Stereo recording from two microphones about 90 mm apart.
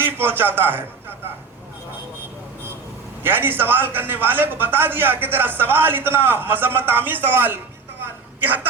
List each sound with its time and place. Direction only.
0.0 s a man's voice: 25° right (ahead or behind)
3.2 s a man's voice: 25° right (ahead or behind)